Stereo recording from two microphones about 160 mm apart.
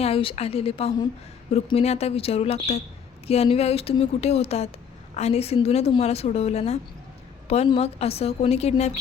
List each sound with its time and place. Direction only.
0.0 s a woman's voice: 35° left (ahead or behind)